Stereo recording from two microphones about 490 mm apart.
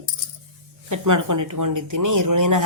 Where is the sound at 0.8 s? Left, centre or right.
Right.